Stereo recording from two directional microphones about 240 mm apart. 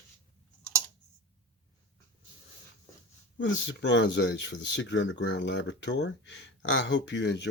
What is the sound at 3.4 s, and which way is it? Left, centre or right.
Speech, left.